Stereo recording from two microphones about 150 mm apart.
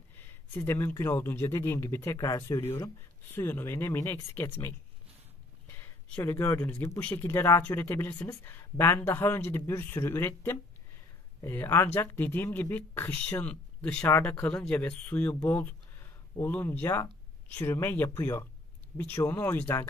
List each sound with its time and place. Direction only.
0.1 s speech: 15° left (ahead or behind)
5.7 s a sound: 10° left (ahead or behind)
6.3 s speech: 20° left (ahead or behind)